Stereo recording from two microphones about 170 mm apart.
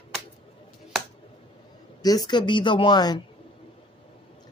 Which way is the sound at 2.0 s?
25° left (ahead or behind).